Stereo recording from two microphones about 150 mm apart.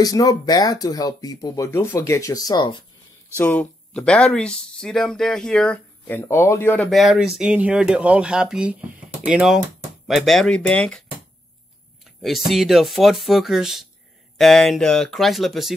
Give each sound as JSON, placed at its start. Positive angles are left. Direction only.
{"t": 0.0, "sound": "speech", "side_deg": 25}
{"t": 3.3, "sound": "speech", "side_deg": 10}
{"t": 6.9, "sound": "speech", "side_deg": 0}
{"t": 12.2, "sound": "speech", "side_deg": 0}